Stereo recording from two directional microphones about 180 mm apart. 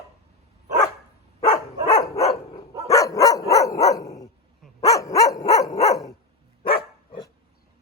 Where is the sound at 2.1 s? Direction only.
35° left (ahead or behind).